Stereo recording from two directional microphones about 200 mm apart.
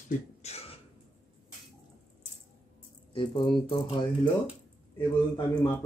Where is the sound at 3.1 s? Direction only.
25° left (ahead or behind).